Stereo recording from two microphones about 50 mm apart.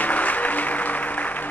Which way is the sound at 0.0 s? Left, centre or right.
Left.